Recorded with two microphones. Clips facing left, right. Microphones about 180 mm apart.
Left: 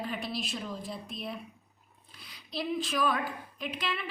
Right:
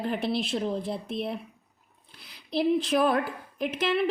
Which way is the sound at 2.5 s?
60° right (ahead or behind).